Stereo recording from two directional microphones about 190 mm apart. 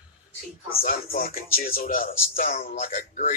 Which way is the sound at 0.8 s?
50° left (ahead or behind).